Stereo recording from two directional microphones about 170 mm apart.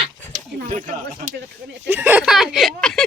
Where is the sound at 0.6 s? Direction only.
50° right (ahead or behind).